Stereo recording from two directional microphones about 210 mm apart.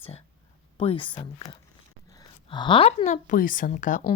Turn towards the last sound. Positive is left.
turn(degrees=40)  # may be behind; listen again after turning